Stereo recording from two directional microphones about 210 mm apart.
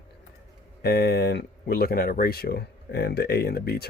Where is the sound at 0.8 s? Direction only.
50° left (ahead or behind).